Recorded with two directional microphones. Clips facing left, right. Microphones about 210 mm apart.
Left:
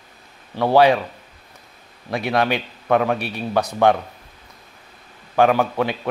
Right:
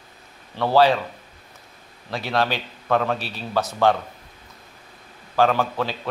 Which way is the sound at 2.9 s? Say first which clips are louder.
Left 3 dB; 15° left (ahead or behind).